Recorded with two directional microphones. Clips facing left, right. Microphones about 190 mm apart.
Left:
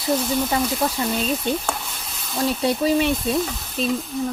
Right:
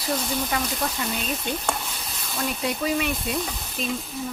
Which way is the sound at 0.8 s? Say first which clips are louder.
Left 5 dB; 30° left (ahead or behind).